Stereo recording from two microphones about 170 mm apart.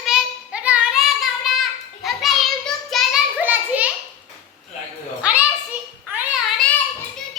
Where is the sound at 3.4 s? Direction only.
10° right (ahead or behind).